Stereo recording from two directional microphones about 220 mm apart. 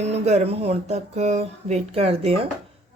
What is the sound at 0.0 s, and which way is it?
Speech, 30° right (ahead or behind).